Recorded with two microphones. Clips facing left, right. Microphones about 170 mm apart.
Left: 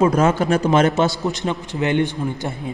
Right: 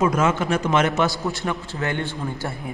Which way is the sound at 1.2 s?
20° left (ahead or behind).